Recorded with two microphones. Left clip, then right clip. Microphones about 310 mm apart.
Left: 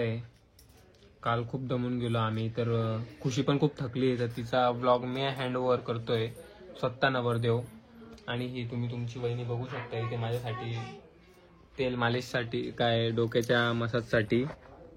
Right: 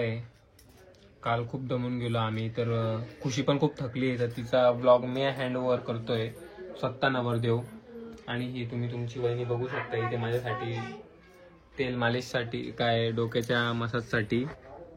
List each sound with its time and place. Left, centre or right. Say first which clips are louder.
1.2 s a man's voice: right 1 dB; centre
11.7 s a man's voice: right 1 dB; centre